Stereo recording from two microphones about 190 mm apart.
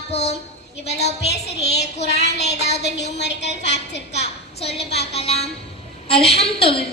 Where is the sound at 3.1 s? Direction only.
65° left (ahead or behind).